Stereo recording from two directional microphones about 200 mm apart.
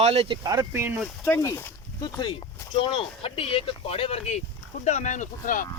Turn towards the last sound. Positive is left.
turn(degrees=40)  # may be behind; listen again after turning